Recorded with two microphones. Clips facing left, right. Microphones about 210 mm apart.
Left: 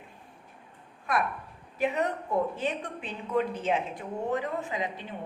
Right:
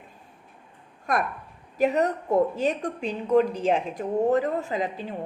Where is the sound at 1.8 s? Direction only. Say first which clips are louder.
Right 6 dB; 40° right (ahead or behind).